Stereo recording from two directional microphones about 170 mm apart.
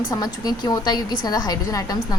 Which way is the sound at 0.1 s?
20° left (ahead or behind).